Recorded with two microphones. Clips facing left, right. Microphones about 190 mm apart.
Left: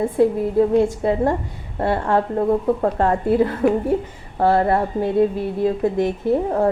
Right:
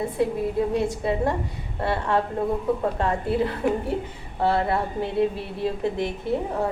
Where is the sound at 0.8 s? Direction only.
50° left (ahead or behind).